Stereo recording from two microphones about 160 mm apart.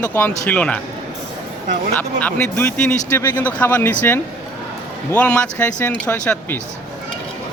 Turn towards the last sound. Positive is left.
turn(degrees=5)  # may be behind; listen again after turning